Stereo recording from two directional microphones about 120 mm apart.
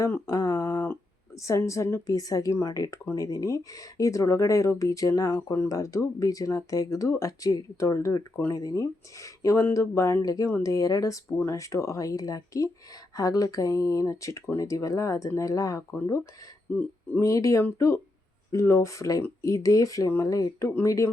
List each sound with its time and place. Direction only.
0.0 s speech: 25° left (ahead or behind)